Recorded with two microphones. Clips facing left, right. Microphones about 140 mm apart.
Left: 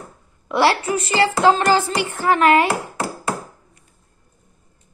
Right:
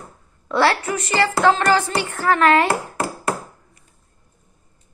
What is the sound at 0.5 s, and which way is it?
Speech, 20° left (ahead or behind).